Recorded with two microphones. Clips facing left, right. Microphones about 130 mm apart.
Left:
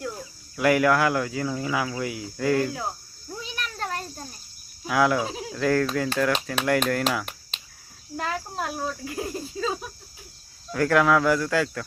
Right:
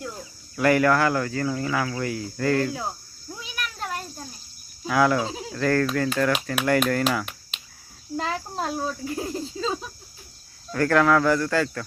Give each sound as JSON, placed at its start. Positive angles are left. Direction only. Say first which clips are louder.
{"t": 0.5, "sound": "speech", "louder": "right 1 dB", "side_deg": 5}
{"t": 4.9, "sound": "speech", "louder": "right 1 dB", "side_deg": 5}
{"t": 8.1, "sound": "speech", "louder": "right 2 dB", "side_deg": -20}
{"t": 10.7, "sound": "speech", "louder": "right 1 dB", "side_deg": 5}